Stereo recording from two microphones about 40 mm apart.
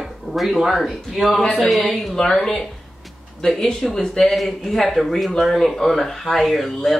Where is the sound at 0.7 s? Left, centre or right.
Centre.